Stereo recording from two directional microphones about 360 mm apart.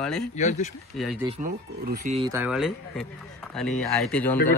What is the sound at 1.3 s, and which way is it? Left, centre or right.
A man's voice, centre.